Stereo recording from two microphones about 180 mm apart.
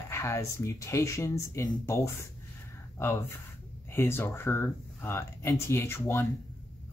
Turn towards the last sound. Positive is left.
turn(degrees=15)  # may be behind; listen again after turning